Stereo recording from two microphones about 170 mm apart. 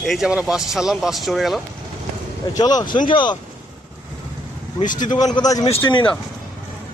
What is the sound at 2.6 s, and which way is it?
Speech, 25° left (ahead or behind).